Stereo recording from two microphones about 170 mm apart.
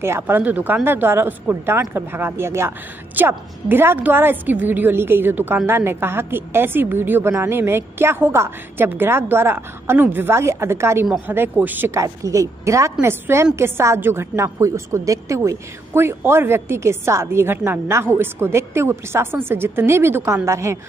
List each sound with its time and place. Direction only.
0.0 s a woman's voice: 15° right (ahead or behind)